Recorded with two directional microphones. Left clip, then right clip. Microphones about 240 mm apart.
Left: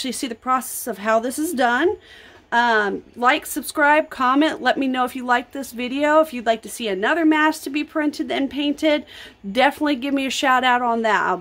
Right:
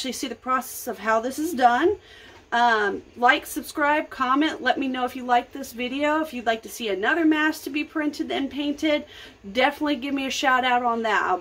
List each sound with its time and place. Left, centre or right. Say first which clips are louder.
0.0 s speech: left 4 dB; left